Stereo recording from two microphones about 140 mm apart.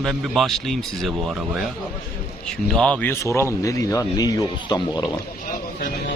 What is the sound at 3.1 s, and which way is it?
Speech, 20° left (ahead or behind).